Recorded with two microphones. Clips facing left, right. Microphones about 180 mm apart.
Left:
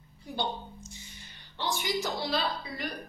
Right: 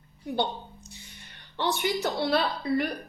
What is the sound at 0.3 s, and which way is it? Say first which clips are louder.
A woman's voice: right 5 dB; 60° right (ahead or behind).